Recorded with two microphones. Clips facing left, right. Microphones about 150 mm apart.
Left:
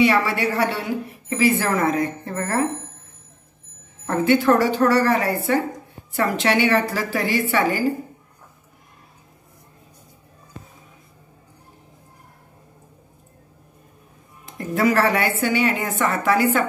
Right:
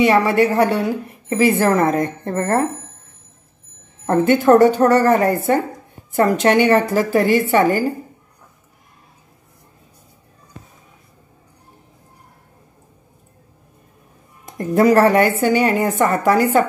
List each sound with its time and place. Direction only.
0.0 s a woman's voice: 50° right (ahead or behind)
4.0 s a woman's voice: 45° right (ahead or behind)
14.4 s a woman's voice: 45° right (ahead or behind)